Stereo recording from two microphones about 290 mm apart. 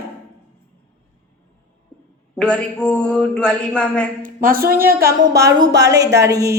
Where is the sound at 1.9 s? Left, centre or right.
Centre.